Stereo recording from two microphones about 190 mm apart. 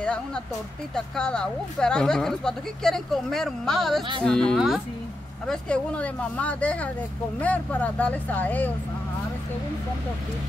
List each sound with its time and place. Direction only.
0.0 s speech: 5° left (ahead or behind)